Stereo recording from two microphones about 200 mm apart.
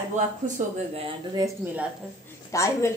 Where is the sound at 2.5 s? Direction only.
15° left (ahead or behind).